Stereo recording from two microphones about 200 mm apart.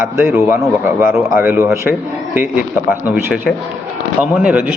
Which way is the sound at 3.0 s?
Centre (ahead or behind).